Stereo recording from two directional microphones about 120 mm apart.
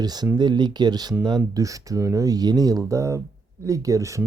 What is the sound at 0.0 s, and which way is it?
Speech, 35° right (ahead or behind).